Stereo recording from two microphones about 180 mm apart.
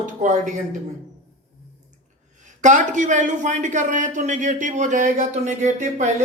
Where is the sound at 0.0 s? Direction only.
45° right (ahead or behind).